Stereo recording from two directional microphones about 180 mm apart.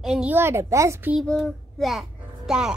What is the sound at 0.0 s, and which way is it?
A child's voice, 5° right (ahead or behind).